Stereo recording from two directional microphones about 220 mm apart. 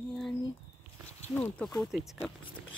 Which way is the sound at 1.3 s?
5° left (ahead or behind).